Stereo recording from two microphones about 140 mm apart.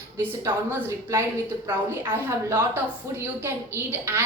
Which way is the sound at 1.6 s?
15° right (ahead or behind).